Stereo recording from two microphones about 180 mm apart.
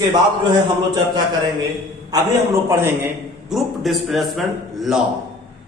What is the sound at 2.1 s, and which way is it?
Speech, 20° right (ahead or behind).